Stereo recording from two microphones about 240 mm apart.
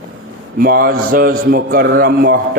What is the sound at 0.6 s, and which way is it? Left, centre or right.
Mantra, right.